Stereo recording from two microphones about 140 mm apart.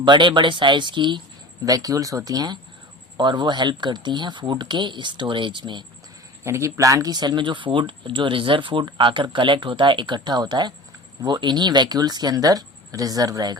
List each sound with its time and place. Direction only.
0.0 s speech: 35° right (ahead or behind)
6.4 s speech: 20° right (ahead or behind)